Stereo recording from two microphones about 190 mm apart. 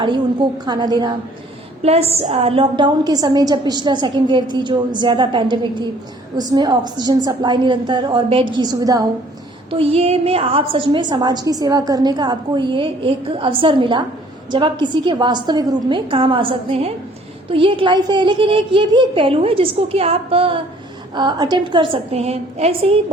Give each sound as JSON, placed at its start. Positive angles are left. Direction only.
{"t": 0.6, "sound": "a woman's voice", "side_deg": -20}
{"t": 9.6, "sound": "a woman's voice", "side_deg": -30}